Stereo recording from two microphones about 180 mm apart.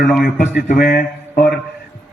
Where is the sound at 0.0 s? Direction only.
Centre (ahead or behind).